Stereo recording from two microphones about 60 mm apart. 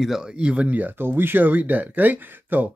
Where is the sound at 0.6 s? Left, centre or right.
Right.